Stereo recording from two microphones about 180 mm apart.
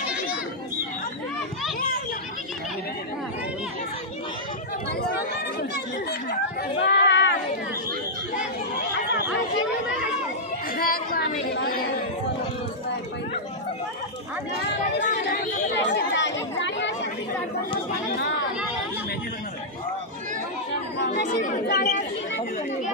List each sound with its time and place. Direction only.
6.8 s a sound: 80° left
10.8 s chatter: 60° left (ahead or behind)
15.0 s chatter: 45° left (ahead or behind)
15.7 s chatter: 80° left
21.3 s chatter: 45° left (ahead or behind)
21.6 s chatter: 65° left (ahead or behind)